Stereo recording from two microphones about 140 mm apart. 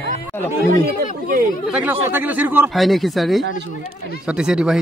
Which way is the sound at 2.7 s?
Centre (ahead or behind).